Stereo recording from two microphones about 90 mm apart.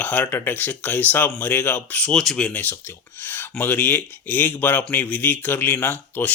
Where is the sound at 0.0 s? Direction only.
15° left (ahead or behind).